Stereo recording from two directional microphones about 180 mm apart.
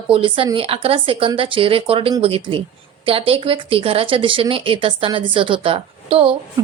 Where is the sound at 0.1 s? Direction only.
30° right (ahead or behind).